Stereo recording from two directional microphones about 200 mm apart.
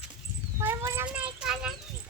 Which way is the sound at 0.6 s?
10° right (ahead or behind).